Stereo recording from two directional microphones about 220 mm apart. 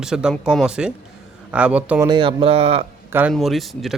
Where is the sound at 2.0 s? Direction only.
20° right (ahead or behind).